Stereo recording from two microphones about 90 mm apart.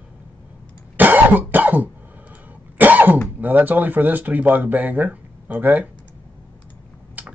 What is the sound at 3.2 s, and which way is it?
Speech, 20° right (ahead or behind).